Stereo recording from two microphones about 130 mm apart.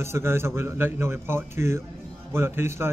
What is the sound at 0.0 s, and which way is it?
Speech, 20° right (ahead or behind).